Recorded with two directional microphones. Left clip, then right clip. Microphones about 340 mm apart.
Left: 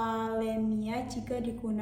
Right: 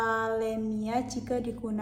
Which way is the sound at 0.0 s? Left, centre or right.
Centre.